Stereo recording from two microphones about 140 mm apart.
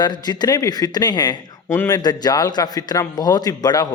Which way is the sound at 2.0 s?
30° left (ahead or behind).